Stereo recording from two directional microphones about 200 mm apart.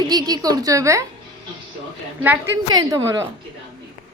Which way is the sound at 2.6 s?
20° right (ahead or behind).